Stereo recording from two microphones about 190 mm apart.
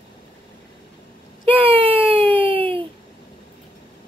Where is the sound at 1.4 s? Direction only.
30° right (ahead or behind).